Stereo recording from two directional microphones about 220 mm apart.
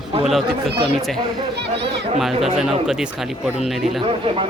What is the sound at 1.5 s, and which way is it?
Speech, 50° right (ahead or behind).